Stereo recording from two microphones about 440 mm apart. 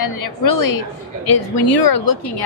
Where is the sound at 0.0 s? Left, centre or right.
Left.